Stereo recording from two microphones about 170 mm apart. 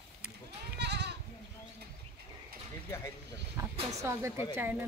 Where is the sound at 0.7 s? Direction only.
80° right.